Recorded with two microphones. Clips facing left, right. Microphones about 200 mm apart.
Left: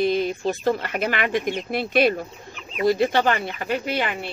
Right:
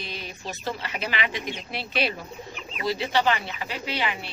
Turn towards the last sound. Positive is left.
turn(degrees=50)  # may be behind; listen again after turning